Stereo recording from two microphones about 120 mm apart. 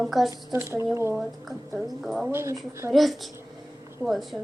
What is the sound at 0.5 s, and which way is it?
Speech, 25° right (ahead or behind).